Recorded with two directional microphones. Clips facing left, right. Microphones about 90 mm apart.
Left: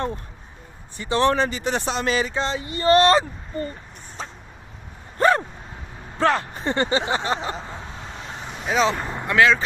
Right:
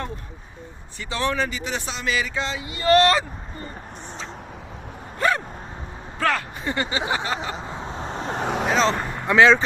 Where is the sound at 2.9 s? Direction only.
30° left (ahead or behind).